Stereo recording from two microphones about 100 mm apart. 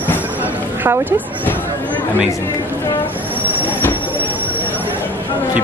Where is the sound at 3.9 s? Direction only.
20° right (ahead or behind).